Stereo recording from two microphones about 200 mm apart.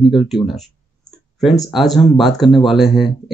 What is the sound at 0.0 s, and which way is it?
Speech, centre (ahead or behind).